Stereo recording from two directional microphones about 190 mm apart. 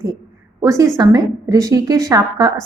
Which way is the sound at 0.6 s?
20° right (ahead or behind).